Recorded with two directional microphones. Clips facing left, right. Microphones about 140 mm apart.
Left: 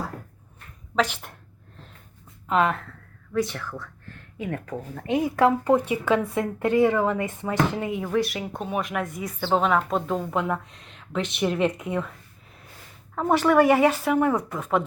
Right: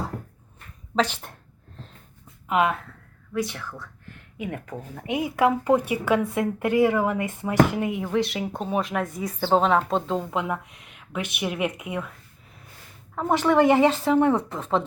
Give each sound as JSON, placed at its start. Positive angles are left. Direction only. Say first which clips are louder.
{"t": 0.9, "sound": "a woman's voice", "louder": "even", "side_deg": -30}
{"t": 2.5, "sound": "speech", "louder": "even", "side_deg": -15}
{"t": 13.3, "sound": "a woman's voice", "louder": "even", "side_deg": -20}